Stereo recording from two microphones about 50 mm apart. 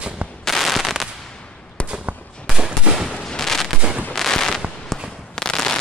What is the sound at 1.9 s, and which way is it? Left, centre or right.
Fireworks, right.